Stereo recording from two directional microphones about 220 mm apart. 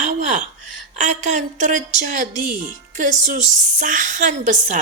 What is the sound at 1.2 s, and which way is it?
A woman's voice, 35° right (ahead or behind).